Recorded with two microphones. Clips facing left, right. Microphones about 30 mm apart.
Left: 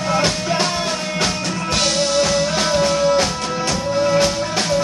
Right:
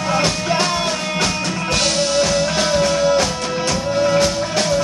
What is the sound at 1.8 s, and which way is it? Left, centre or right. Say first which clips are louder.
Music: even; centre.